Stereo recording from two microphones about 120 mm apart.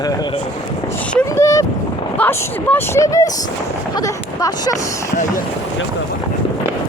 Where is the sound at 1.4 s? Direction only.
25° left (ahead or behind).